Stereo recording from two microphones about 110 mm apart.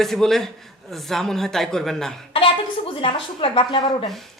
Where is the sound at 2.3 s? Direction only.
55° left (ahead or behind).